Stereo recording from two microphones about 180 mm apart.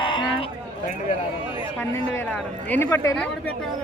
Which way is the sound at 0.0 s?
30° left (ahead or behind).